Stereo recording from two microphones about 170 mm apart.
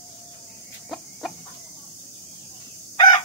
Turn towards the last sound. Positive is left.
turn(degrees=20)  # may be behind; listen again after turning